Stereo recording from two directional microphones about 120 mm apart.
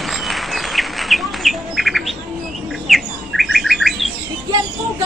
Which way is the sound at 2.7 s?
Centre (ahead or behind).